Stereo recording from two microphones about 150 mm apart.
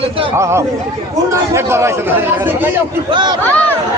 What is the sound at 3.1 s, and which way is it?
Speech, 30° right (ahead or behind).